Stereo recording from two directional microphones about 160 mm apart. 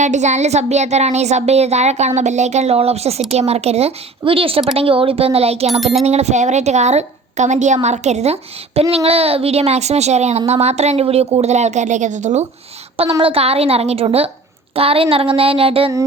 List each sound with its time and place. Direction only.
0.0 s a woman's voice: 45° right (ahead or behind)